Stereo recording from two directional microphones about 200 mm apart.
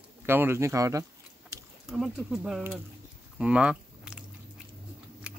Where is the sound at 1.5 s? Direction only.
15° right (ahead or behind).